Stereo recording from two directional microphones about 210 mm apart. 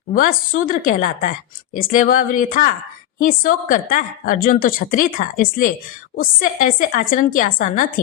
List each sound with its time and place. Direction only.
0.1 s a woman's voice: 40° left (ahead or behind)